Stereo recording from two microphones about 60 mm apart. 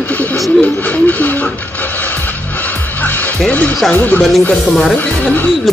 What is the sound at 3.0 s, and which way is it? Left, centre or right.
Music, left.